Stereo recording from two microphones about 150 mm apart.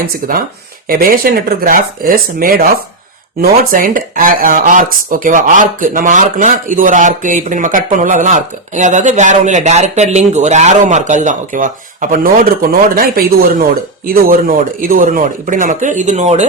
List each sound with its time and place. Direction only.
0.0 s speech: 80° right
3.7 s speech: 70° right (ahead or behind); by 16.5 s 50° right (ahead or behind)